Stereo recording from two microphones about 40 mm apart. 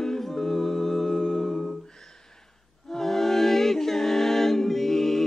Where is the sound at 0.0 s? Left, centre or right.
Centre.